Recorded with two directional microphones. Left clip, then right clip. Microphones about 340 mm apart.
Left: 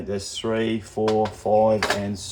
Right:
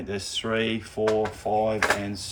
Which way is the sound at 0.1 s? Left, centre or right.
Centre.